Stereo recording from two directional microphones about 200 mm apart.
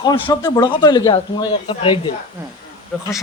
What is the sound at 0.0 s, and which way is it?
Speech, 20° left (ahead or behind).